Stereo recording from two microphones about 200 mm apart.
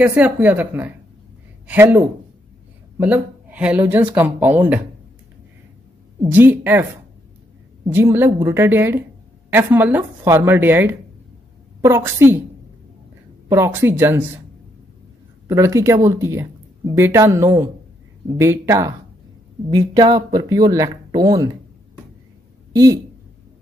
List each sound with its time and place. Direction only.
0.0 s speech: 5° right (ahead or behind)
6.3 s speech: 10° right (ahead or behind)
13.5 s speech: 15° right (ahead or behind)
15.4 s speech: 15° right (ahead or behind)
22.7 s speech: 15° right (ahead or behind)